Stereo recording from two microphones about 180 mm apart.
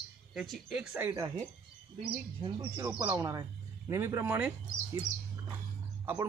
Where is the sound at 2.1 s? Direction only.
30° right (ahead or behind).